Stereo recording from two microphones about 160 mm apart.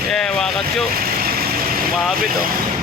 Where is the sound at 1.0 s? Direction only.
70° right (ahead or behind).